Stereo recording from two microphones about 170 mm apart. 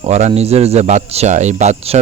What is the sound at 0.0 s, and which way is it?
Speech, 40° right (ahead or behind).